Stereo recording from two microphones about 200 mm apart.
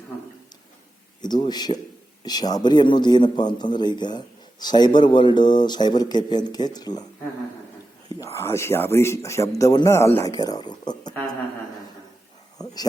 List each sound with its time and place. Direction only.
1.2 s speech: 20° left (ahead or behind)
8.2 s speech: 15° left (ahead or behind)